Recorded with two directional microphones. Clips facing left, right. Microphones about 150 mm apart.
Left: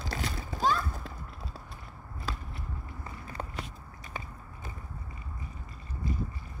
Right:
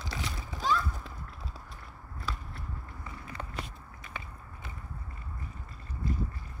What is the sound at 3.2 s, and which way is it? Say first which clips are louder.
Walk: left 1 dB; 40° left (ahead or behind).